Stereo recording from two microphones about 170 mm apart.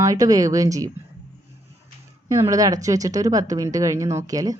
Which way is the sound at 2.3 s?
20° right (ahead or behind).